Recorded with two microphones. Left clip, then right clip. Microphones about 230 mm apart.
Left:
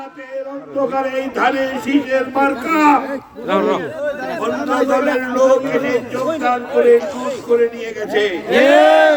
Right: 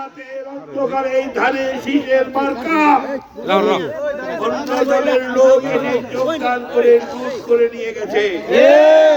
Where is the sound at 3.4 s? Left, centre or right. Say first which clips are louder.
Right 2 dB; right.